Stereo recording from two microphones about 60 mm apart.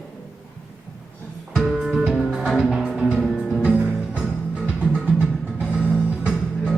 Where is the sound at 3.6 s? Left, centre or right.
Right.